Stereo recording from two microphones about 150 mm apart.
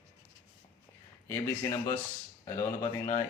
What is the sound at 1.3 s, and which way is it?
Speech, 20° left (ahead or behind).